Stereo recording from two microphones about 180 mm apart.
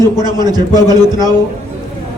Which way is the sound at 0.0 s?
25° right (ahead or behind).